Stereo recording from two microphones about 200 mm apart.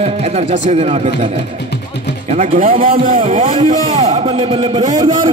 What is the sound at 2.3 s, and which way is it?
Speech, 40° right (ahead or behind).